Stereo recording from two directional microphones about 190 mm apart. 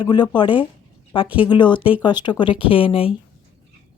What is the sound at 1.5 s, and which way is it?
Speech, 25° left (ahead or behind).